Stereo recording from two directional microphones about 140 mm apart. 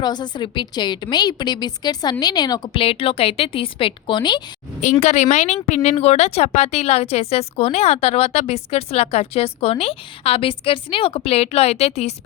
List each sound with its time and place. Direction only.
0.0 s a woman's voice: 30° left (ahead or behind)
4.8 s a woman's voice: 55° left (ahead or behind)